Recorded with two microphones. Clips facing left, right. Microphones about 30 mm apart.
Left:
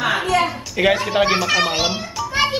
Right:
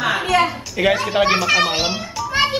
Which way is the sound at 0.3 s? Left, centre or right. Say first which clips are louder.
Right 3 dB; right.